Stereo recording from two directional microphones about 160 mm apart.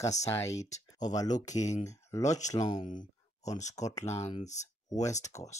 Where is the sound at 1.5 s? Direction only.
45° left (ahead or behind).